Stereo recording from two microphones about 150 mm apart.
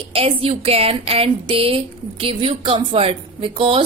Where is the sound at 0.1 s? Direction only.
40° right (ahead or behind).